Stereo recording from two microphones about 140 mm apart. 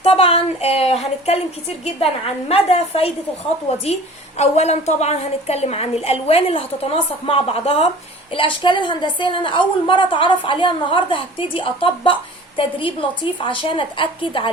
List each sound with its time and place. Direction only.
0.0 s a sound: 45° left (ahead or behind)
1.8 s a woman's voice: 45° left (ahead or behind)
4.4 s a woman's voice: 50° left (ahead or behind)